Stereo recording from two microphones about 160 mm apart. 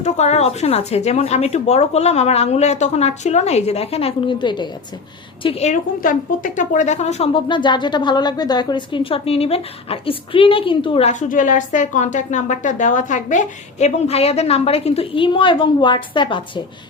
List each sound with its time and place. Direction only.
0.0 s a woman's voice: 45° left (ahead or behind)
11.1 s a woman's voice: 50° left (ahead or behind); by 16.4 s 30° left (ahead or behind)